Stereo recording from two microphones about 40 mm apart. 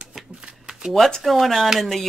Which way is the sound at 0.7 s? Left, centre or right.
Centre.